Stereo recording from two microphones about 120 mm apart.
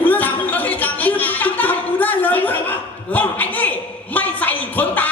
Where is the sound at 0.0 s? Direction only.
15° left (ahead or behind).